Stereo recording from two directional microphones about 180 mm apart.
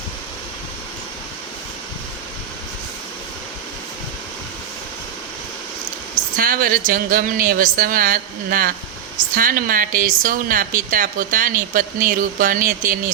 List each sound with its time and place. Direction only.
6.3 s speech: 50° right (ahead or behind)